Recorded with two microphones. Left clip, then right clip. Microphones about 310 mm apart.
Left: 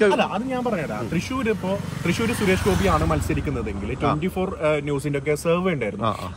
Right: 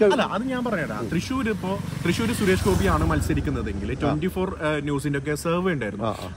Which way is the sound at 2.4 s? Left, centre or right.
Centre.